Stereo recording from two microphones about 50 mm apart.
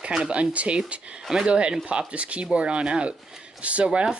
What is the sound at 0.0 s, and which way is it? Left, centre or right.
Speech, centre.